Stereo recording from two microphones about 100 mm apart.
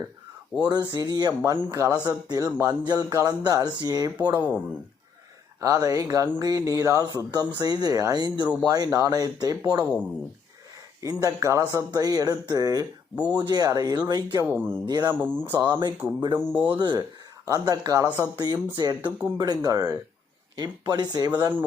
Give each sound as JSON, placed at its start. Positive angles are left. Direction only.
{"t": 0.6, "sound": "speech", "side_deg": -45}
{"t": 1.5, "sound": "speech", "side_deg": -30}
{"t": 4.4, "sound": "speech", "side_deg": -15}
{"t": 5.5, "sound": "speech", "side_deg": -35}
{"t": 9.8, "sound": "speech", "side_deg": -15}
{"t": 11.0, "sound": "speech", "side_deg": -35}
{"t": 14.4, "sound": "speech", "side_deg": -20}
{"t": 14.8, "sound": "speech", "side_deg": -45}
{"t": 15.1, "sound": "speech", "side_deg": -20}
{"t": 16.7, "sound": "speech", "side_deg": -50}